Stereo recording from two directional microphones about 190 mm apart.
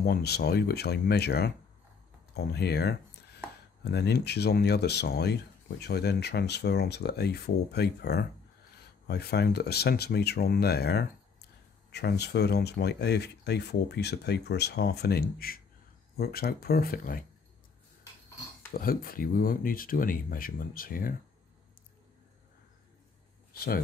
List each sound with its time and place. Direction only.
0.0 s speech: 55° left (ahead or behind)
18.7 s speech: 50° left (ahead or behind)